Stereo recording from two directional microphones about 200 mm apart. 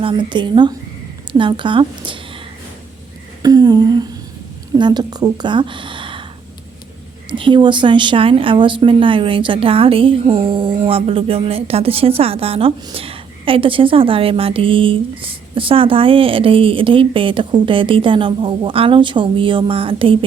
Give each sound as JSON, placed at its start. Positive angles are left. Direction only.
{"t": 0.0, "sound": "a woman's voice", "side_deg": -25}
{"t": 3.4, "sound": "a woman's voice", "side_deg": -20}
{"t": 7.3, "sound": "a woman's voice", "side_deg": -25}